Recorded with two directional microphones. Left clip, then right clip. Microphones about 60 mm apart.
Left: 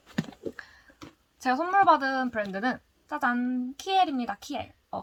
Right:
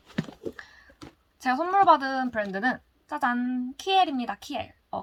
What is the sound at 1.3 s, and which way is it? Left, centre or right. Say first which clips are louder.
A woman's voice: right 1 dB; left.